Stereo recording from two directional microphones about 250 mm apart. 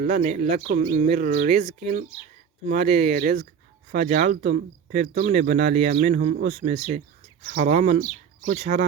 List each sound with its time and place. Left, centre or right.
0.0 s speech: right